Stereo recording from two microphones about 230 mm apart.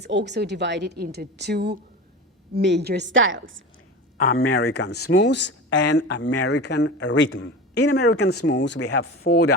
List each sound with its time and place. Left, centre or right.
0.0 s a woman's voice: right
4.2 s speech: left
4.4 s speech: left
5.1 s speech: left
8.3 s speech: left